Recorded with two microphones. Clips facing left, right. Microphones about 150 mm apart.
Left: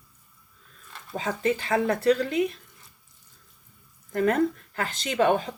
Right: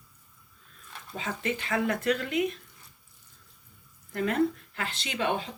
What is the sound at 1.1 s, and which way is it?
Speech, 35° left (ahead or behind).